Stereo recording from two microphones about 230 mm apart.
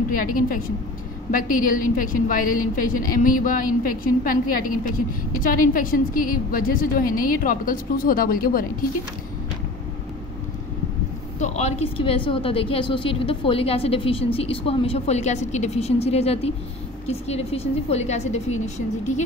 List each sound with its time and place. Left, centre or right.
0.1 s a woman's voice: left
11.3 s a woman's voice: left